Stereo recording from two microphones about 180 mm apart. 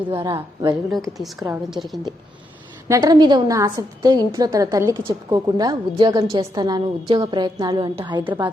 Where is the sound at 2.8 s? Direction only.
20° right (ahead or behind).